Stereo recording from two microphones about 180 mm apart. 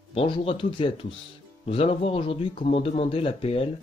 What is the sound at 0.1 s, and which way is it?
Speech, 30° left (ahead or behind).